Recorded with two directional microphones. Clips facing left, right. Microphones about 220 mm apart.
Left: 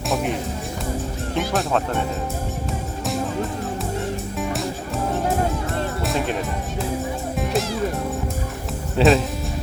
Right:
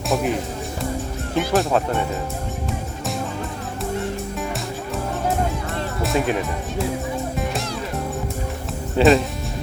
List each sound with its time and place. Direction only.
0.1 s music: centre (ahead or behind)
1.4 s speech: centre (ahead or behind)
6.0 s music: centre (ahead or behind)
9.0 s speech: centre (ahead or behind)